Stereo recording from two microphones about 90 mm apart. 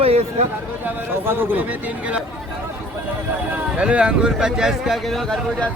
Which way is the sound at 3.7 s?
10° right (ahead or behind).